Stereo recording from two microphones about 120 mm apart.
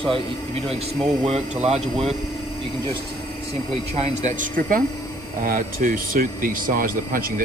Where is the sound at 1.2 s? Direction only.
65° right (ahead or behind).